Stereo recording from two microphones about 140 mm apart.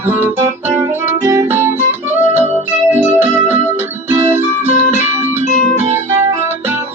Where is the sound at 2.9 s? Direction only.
15° right (ahead or behind).